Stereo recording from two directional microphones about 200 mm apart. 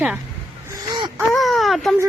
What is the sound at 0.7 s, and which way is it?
Wail, 25° right (ahead or behind).